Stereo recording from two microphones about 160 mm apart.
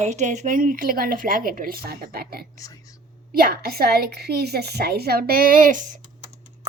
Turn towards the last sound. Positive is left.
turn(degrees=-50)  # may be behind; listen again after turning